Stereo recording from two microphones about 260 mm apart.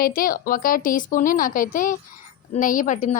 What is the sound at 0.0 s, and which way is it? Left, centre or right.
A woman's voice, left.